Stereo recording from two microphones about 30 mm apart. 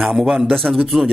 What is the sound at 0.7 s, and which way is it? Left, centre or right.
Speech, right.